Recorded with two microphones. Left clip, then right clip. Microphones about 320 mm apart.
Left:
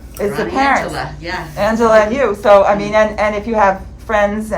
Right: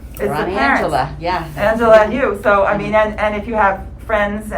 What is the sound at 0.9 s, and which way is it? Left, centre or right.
Speech, centre.